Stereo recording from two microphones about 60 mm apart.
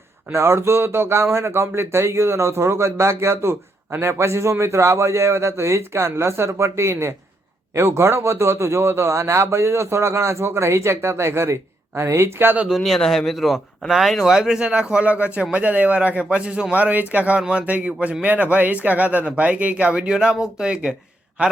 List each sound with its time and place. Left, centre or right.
0.3 s speech: right
12.8 s speech: centre; by 21.5 s right